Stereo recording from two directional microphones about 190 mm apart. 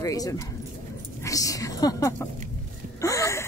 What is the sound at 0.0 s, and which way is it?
Speech, 15° left (ahead or behind).